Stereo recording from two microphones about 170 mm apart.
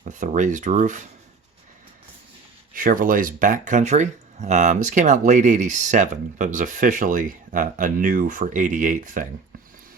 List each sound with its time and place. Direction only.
0.0 s speech: 45° right (ahead or behind)
2.7 s speech: 55° right (ahead or behind)